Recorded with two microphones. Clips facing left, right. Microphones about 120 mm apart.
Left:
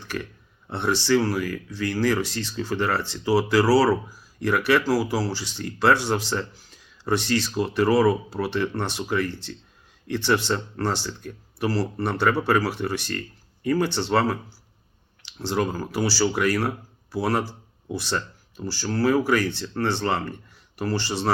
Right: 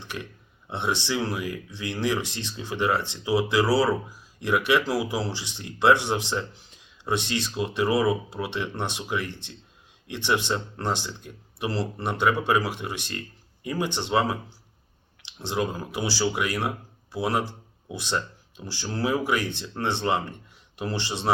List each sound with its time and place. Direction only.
0.7 s speech: 20° right (ahead or behind)